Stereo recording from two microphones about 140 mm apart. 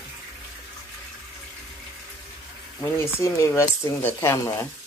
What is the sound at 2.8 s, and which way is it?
Speech, 20° left (ahead or behind).